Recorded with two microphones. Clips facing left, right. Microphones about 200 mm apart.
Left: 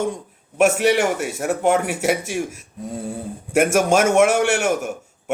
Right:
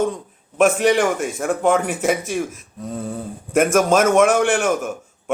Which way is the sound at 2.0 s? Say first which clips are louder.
Right 1 dB; 50° right (ahead or behind).